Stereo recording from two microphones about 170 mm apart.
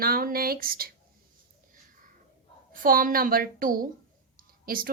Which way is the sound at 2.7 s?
55° right (ahead or behind).